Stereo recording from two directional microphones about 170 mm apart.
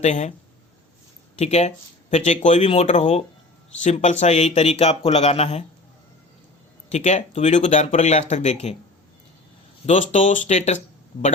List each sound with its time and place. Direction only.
0.0 s speech: 40° left (ahead or behind)
1.4 s speech: 40° left (ahead or behind)
6.9 s speech: 45° left (ahead or behind)
9.8 s speech: 45° left (ahead or behind)